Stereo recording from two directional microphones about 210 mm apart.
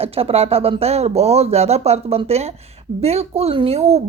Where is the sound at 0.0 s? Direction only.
30° right (ahead or behind).